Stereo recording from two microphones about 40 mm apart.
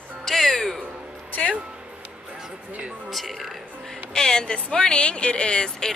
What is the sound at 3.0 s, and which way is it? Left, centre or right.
Speech, centre.